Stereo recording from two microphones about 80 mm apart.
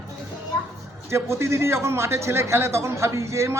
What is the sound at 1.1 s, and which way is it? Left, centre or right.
A man's voice, right.